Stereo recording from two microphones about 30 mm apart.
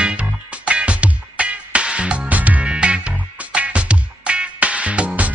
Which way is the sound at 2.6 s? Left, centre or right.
Right.